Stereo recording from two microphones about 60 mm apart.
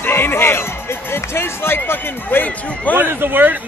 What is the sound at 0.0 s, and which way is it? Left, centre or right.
Speech, left.